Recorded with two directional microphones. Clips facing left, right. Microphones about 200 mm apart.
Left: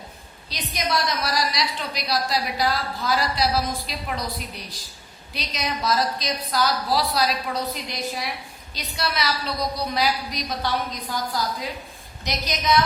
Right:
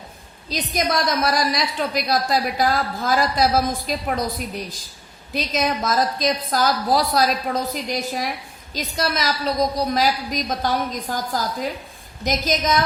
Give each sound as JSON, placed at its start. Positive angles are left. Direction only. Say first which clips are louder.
{"t": 0.5, "sound": "a woman's voice", "louder": "right 4 dB", "side_deg": -50}